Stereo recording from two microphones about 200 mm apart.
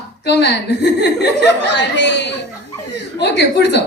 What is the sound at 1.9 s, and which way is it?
Speech, 60° left (ahead or behind).